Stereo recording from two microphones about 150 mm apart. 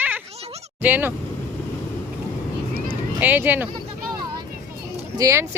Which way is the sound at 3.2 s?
10° right (ahead or behind).